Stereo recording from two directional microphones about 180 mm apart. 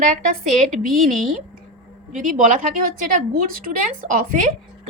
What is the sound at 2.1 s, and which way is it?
A woman's voice, 45° right (ahead or behind).